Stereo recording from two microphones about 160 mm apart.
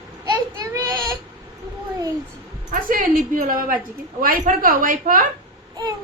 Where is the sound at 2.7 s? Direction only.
60° right (ahead or behind).